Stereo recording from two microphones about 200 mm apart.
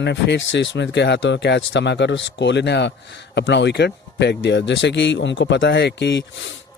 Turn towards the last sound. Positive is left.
turn(degrees=65)  # may be behind; listen again after turning